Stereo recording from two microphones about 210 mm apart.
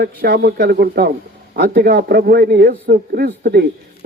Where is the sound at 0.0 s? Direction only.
50° right (ahead or behind).